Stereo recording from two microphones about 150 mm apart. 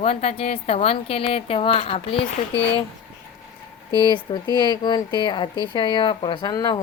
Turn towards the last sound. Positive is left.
turn(degrees=25)  # may be behind; listen again after turning